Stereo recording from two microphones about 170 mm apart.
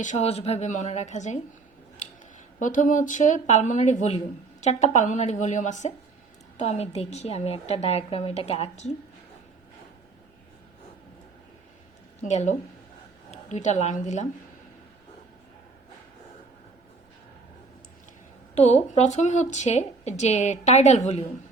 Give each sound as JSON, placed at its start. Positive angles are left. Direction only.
{"t": 0.0, "sound": "speech", "side_deg": 45}
{"t": 2.6, "sound": "speech", "side_deg": 50}
{"t": 12.2, "sound": "a woman's voice", "side_deg": 45}
{"t": 18.5, "sound": "speech", "side_deg": 40}